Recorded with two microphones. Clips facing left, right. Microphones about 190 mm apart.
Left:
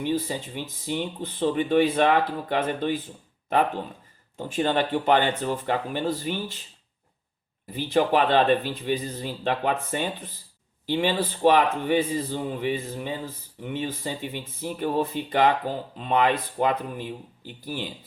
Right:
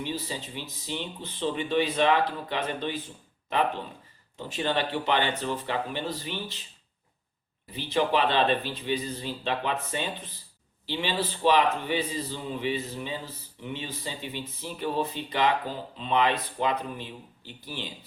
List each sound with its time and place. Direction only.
0.0 s speech: 50° left (ahead or behind)
4.4 s speech: 45° left (ahead or behind)
7.7 s speech: 50° left (ahead or behind)